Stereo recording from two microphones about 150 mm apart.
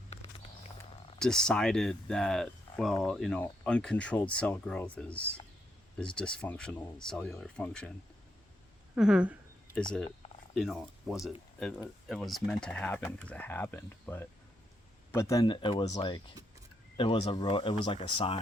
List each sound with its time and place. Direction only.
0.1 s a sound: 40° left (ahead or behind)
1.2 s speech: 5° left (ahead or behind)
9.0 s speech: 5° right (ahead or behind)
10.5 s speech: centre (ahead or behind); by 18.3 s 35° left (ahead or behind)